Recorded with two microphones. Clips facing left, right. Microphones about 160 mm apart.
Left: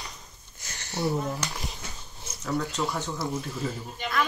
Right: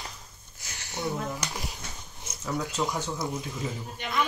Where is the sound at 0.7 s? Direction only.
15° right (ahead or behind).